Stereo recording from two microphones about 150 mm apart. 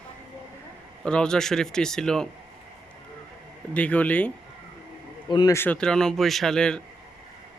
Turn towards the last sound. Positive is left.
turn(degrees=5)  # may be behind; listen again after turning